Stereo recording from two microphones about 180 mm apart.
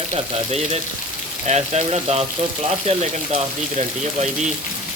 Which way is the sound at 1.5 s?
35° right (ahead or behind).